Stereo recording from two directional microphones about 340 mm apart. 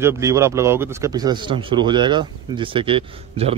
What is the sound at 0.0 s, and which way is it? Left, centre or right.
A man's voice, centre.